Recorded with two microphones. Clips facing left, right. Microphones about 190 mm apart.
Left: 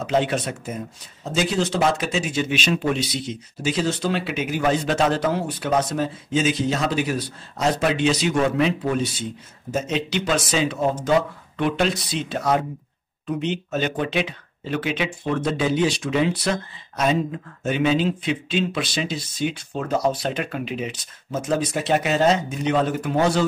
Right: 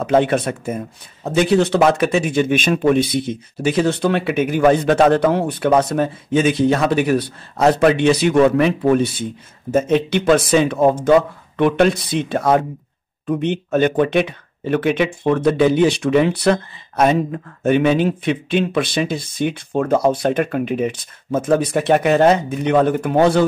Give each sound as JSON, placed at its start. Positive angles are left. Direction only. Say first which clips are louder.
{"t": 0.0, "sound": "speech", "louder": "right 6 dB", "side_deg": -55}